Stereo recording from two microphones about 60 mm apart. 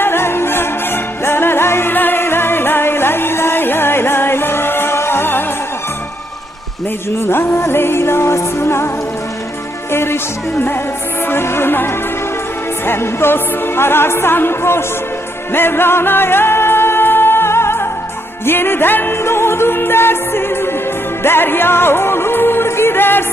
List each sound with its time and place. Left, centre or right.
0.0 s music: left
7.2 s music: left
9.9 s music: left